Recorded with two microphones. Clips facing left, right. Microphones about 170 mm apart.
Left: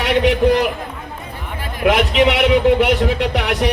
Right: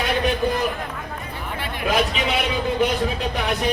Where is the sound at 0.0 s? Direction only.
80° left.